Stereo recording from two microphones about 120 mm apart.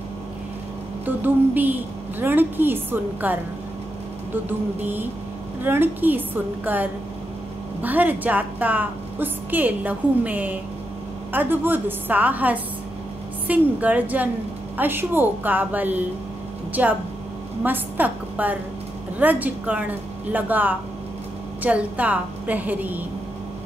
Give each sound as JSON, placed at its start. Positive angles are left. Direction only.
{"t": 1.0, "sound": "a woman's voice", "side_deg": -15}
{"t": 4.5, "sound": "a woman's voice", "side_deg": -15}